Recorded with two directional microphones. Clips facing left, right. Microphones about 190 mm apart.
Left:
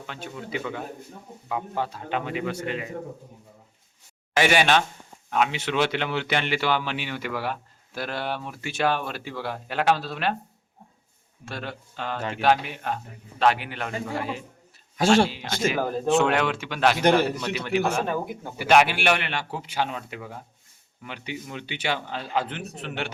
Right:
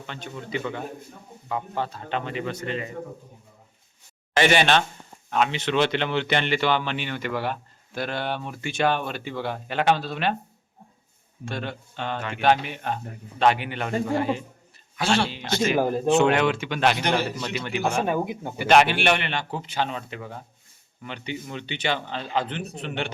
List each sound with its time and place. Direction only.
0.0 s a man's voice: 5° left (ahead or behind)
4.4 s a man's voice: 10° left (ahead or behind)
11.4 s speech: centre (ahead or behind)
14.9 s speech: 45° left (ahead or behind)
15.8 s speech: 10° right (ahead or behind)
16.0 s speech: centre (ahead or behind)
17.0 s a man's voice: 55° left (ahead or behind)
17.2 s speech: centre (ahead or behind)
18.0 s speech: 15° right (ahead or behind)
18.5 s a man's voice: 5° left (ahead or behind)